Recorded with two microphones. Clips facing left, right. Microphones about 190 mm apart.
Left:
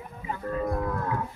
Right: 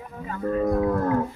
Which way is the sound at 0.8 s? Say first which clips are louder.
Right 8 dB; 50° right (ahead or behind).